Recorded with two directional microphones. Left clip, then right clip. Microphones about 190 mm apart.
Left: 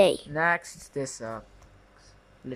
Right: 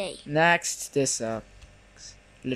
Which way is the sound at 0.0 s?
50° left (ahead or behind).